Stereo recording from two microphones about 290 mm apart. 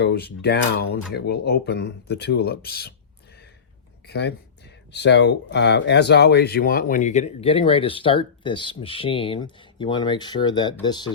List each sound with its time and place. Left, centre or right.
0.0 s speech: left
4.0 s speech: left; by 11.1 s centre